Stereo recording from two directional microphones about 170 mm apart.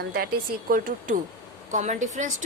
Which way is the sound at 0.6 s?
55° right (ahead or behind).